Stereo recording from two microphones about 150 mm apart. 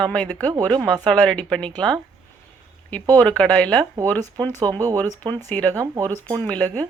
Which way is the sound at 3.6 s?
25° right (ahead or behind).